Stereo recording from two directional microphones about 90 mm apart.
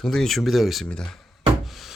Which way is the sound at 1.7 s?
Centre (ahead or behind).